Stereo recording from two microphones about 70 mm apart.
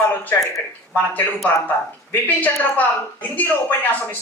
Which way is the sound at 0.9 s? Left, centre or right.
Left.